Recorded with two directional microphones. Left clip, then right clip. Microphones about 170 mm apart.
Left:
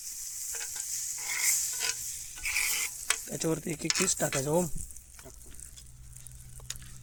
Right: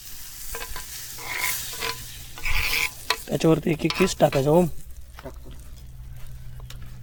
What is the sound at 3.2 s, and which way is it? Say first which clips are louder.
Stir: right 11 dB; 15° left (ahead or behind).